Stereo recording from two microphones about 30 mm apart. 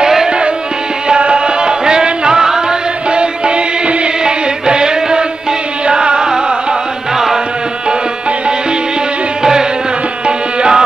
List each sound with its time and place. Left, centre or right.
1.0 s music: right
3.1 s music: right
4.2 s music: right
9.4 s music: right
10.2 s tabla: right